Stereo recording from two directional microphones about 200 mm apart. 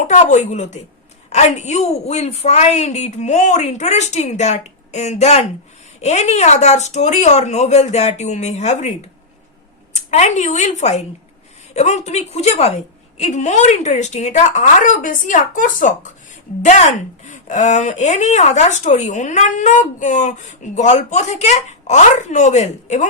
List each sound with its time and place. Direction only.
0.0 s a woman's voice: 35° left (ahead or behind)
9.9 s speech: 35° left (ahead or behind)